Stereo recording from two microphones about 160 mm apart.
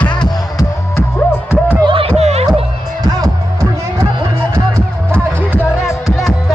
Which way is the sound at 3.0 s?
20° right (ahead or behind).